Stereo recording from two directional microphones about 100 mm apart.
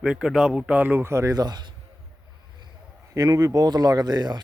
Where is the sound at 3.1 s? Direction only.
35° right (ahead or behind).